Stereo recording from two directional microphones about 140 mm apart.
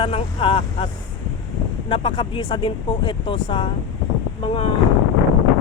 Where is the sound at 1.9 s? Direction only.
35° left (ahead or behind).